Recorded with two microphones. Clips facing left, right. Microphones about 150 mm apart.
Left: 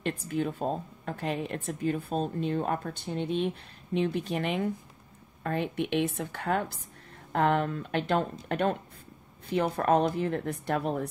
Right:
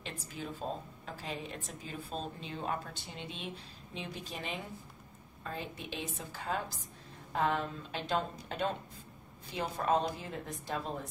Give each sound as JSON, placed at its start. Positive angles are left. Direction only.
{"t": 0.0, "sound": "a woman's voice", "side_deg": 60}